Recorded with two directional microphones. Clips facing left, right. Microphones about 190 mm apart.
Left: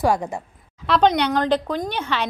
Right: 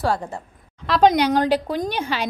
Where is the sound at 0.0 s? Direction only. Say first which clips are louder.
Left 3 dB; 15° left (ahead or behind).